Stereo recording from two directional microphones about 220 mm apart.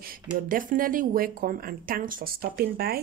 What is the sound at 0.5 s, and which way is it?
Speech, 40° right (ahead or behind).